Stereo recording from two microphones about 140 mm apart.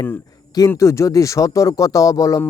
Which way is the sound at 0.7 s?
20° left (ahead or behind).